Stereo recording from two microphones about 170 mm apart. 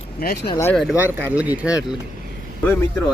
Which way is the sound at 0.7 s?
Centre (ahead or behind).